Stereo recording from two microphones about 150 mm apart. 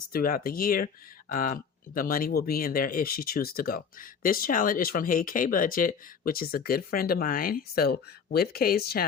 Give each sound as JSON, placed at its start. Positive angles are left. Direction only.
{"t": 0.1, "sound": "speech", "side_deg": 75}